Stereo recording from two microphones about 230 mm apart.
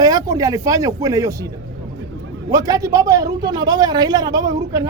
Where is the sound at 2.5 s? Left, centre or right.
Centre.